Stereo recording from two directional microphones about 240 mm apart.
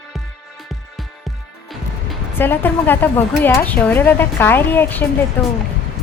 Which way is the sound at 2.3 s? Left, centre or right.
Centre.